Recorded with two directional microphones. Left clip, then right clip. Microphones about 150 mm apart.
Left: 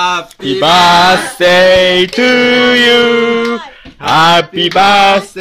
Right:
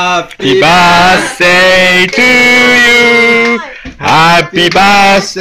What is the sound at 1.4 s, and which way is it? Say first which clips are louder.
Music: even; 35° left (ahead or behind).